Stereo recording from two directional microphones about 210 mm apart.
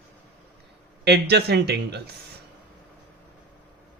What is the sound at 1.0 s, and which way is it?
Speech, 50° right (ahead or behind).